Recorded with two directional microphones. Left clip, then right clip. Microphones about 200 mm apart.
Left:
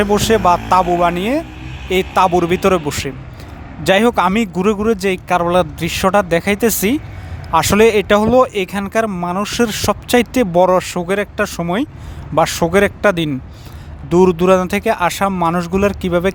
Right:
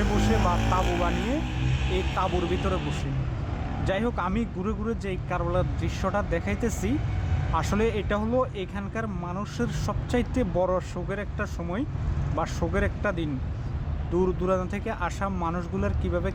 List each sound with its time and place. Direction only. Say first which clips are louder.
0.4 s speech: left 14 dB; 55° left (ahead or behind)
2.1 s speech: left 16 dB; 50° left (ahead or behind)